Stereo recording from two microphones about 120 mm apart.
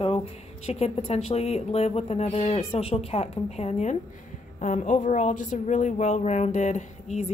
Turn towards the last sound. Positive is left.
turn(degrees=80)